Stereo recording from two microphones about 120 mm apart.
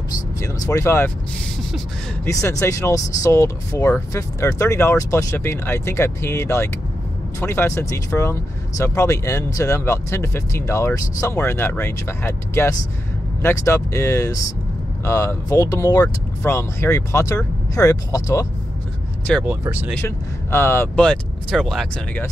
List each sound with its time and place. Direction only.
0.4 s speech: 25° left (ahead or behind)
2.6 s speech: 25° left (ahead or behind)
19.3 s speech: 5° left (ahead or behind)
20.5 s speech: 20° left (ahead or behind)
21.0 s speech: 5° left (ahead or behind)